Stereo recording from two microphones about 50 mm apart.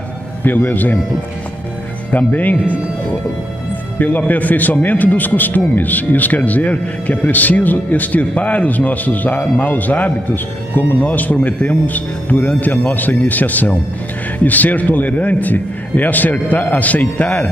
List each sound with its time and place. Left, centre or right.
0.4 s speech: left
2.1 s speech: left
4.3 s speech: left